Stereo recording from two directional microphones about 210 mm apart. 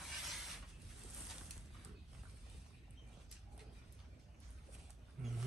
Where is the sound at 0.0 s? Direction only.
Centre (ahead or behind).